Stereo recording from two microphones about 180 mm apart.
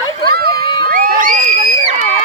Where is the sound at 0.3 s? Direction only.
60° right (ahead or behind).